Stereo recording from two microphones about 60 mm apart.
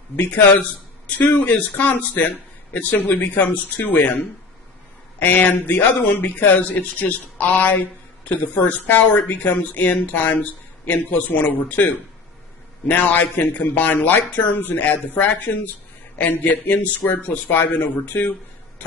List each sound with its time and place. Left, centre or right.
0.1 s a man's voice: left
5.2 s a man's voice: left